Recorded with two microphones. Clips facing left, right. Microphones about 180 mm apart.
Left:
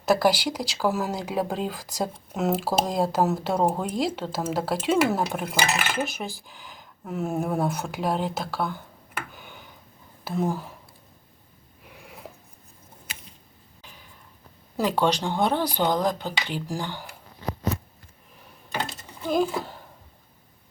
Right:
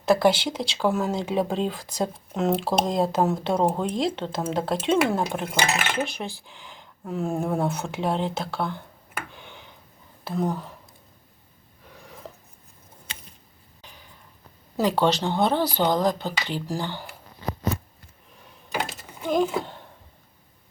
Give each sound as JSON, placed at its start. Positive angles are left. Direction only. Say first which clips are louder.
{"t": 0.1, "sound": "speech", "louder": "right 1 dB", "side_deg": 5}
{"t": 9.3, "sound": "tick", "louder": "even", "side_deg": 5}
{"t": 10.2, "sound": "speech", "louder": "even", "side_deg": 5}
{"t": 11.9, "sound": "a sound", "louder": "right 1 dB", "side_deg": 10}
{"t": 15.0, "sound": "speech", "louder": "right 1 dB", "side_deg": 10}
{"t": 18.7, "sound": "a sound", "louder": "right 1 dB", "side_deg": -10}
{"t": 19.3, "sound": "speech", "louder": "right 1 dB", "side_deg": 5}